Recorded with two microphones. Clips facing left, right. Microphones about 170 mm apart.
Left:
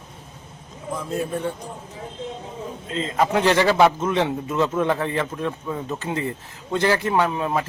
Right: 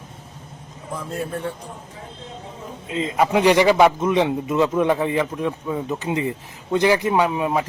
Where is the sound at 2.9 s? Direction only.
15° right (ahead or behind).